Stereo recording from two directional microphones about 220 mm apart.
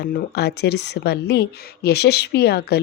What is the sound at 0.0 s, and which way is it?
Speech, 50° left (ahead or behind).